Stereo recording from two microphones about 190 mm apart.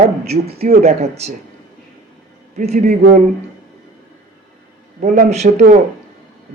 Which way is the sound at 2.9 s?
50° right (ahead or behind).